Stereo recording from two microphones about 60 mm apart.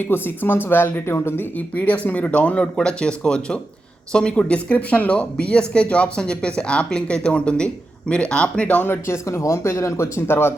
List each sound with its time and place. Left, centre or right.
0.0 s speech: left
1.5 s speech: left
8.9 s speech: left